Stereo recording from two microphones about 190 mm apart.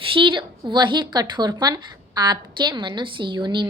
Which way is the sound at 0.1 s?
25° right (ahead or behind).